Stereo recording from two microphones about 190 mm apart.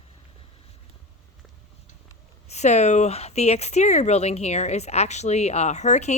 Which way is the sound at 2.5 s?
35° left (ahead or behind).